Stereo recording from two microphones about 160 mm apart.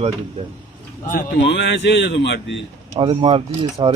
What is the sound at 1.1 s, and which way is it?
A man's voice, 90° left.